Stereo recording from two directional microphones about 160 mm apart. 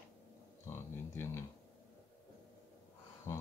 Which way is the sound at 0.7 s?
15° left (ahead or behind).